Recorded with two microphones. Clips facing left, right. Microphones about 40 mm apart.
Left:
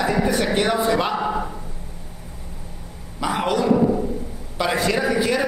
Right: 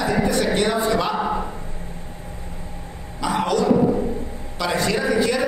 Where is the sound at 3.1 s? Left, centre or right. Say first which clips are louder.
Right 1 dB; centre.